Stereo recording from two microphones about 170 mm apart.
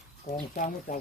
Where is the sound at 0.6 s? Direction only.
50° left (ahead or behind).